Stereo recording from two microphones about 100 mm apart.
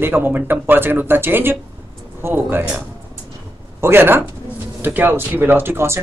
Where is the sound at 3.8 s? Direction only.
20° right (ahead or behind).